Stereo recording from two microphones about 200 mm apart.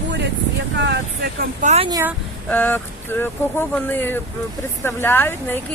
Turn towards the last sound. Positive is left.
turn(degrees=10)  # may be behind; listen again after turning